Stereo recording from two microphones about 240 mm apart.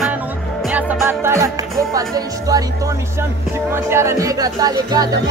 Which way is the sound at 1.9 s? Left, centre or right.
Centre.